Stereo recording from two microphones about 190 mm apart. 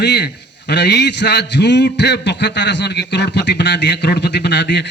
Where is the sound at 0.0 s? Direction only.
60° left (ahead or behind).